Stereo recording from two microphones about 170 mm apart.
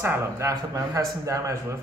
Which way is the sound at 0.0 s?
15° right (ahead or behind).